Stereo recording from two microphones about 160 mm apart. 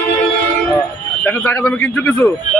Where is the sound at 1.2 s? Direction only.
10° left (ahead or behind).